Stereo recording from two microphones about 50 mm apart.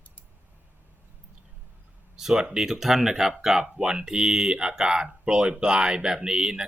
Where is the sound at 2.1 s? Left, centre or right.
Centre.